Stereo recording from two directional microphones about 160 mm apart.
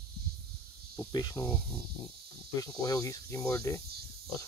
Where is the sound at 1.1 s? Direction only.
25° left (ahead or behind).